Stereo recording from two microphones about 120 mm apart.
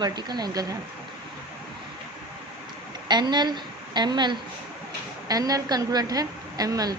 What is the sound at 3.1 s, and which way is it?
A woman's voice, 40° right (ahead or behind).